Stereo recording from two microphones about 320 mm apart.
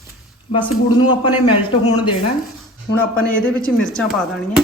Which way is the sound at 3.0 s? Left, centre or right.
Left.